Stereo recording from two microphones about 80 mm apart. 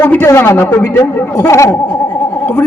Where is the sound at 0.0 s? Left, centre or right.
Left.